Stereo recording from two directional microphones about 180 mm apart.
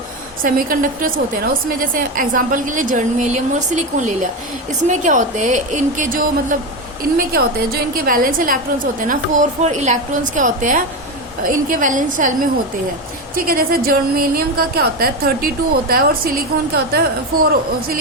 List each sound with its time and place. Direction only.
0.4 s a woman's voice: 50° right (ahead or behind)